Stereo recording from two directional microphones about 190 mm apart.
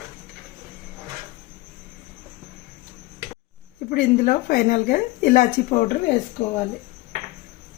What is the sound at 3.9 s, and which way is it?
Speech, 40° left (ahead or behind).